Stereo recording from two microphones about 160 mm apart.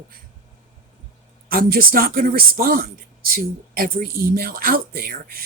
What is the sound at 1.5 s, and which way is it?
Speech, 65° right (ahead or behind).